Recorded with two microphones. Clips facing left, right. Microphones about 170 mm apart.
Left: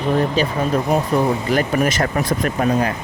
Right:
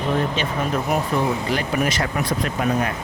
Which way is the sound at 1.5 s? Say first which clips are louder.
Left 4 dB; 45° left (ahead or behind).